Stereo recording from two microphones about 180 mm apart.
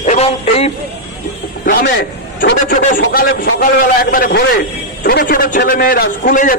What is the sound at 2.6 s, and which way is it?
A man's voice, 50° left (ahead or behind).